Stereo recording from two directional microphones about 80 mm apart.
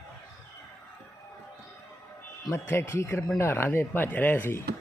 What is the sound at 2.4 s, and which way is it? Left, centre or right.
Speech, left.